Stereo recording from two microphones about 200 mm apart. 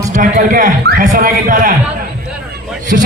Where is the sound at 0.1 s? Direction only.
40° right (ahead or behind).